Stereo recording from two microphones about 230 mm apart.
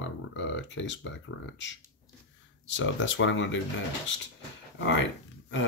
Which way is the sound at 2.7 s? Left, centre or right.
Left.